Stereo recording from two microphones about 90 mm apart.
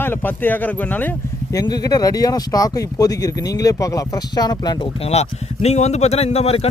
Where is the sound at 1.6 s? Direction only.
50° left (ahead or behind).